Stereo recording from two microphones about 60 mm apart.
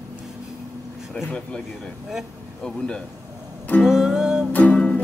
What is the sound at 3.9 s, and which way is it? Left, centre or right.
Music, centre.